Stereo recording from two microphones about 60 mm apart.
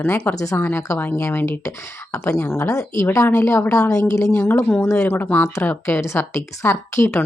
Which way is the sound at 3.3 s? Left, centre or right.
Left.